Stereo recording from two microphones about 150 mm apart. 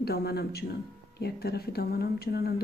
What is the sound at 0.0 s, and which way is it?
Speech, 90° left.